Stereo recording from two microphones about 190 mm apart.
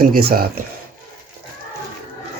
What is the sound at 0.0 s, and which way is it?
Speech, 50° right (ahead or behind).